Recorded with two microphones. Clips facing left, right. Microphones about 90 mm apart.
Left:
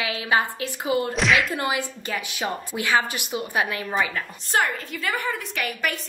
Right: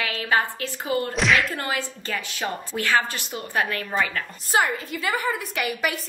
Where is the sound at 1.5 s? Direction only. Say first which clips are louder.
Left 2 dB; 15° left (ahead or behind).